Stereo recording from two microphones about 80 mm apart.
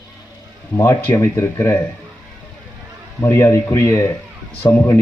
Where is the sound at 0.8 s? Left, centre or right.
Left.